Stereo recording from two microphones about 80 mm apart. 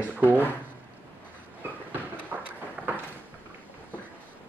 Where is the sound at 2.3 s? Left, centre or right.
Right.